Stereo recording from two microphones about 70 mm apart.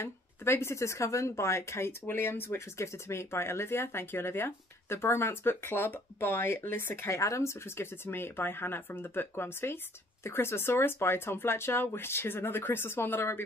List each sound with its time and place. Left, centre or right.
0.0 s a woman's voice: left
7.2 s a woman's voice: left